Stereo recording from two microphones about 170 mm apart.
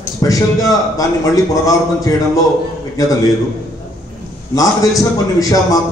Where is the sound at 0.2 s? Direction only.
20° left (ahead or behind).